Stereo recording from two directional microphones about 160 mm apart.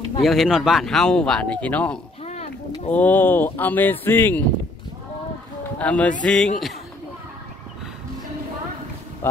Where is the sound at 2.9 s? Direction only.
10° left (ahead or behind).